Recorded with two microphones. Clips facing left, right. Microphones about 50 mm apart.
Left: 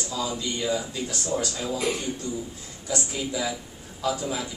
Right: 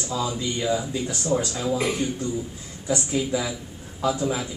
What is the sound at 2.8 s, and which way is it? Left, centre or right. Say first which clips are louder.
A man's voice: right 5 dB; centre.